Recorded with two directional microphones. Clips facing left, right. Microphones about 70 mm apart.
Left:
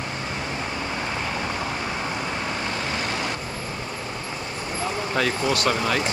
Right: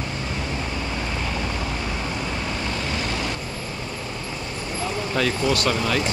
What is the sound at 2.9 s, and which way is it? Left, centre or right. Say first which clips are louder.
Vehicle: even; left.